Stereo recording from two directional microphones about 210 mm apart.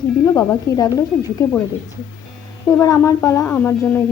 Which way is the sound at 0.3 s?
15° left (ahead or behind).